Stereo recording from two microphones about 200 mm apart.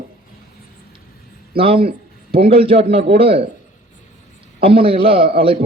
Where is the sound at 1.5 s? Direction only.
30° right (ahead or behind).